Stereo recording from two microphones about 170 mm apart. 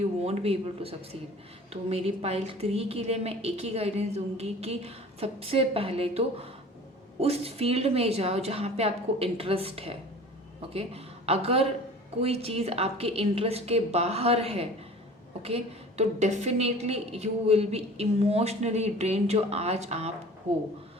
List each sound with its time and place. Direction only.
0.0 s a woman's voice: 40° right (ahead or behind)